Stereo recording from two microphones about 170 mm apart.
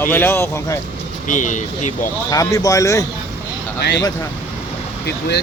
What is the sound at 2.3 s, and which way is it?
Speech, 20° left (ahead or behind).